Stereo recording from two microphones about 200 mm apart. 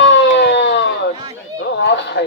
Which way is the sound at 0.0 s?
65° left (ahead or behind).